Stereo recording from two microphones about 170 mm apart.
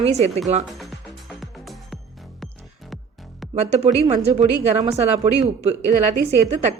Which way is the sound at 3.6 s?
40° right (ahead or behind).